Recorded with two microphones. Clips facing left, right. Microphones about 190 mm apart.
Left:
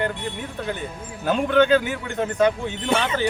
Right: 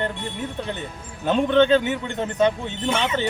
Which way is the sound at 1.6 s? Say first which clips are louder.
Even; 25° right (ahead or behind).